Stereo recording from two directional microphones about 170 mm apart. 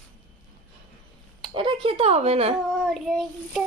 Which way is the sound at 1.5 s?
30° right (ahead or behind).